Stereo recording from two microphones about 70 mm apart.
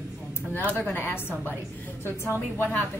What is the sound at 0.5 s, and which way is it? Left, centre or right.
A woman's voice, left.